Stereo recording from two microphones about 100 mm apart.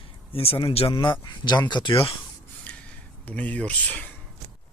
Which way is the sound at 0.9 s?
50° left (ahead or behind).